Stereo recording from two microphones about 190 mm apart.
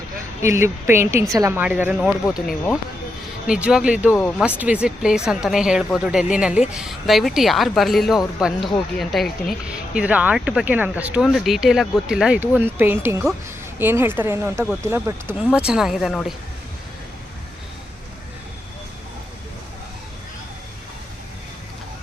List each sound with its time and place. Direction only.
0.4 s speech: 15° right (ahead or behind)